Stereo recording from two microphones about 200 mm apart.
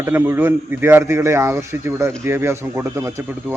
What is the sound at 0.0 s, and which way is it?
Speech, 10° right (ahead or behind).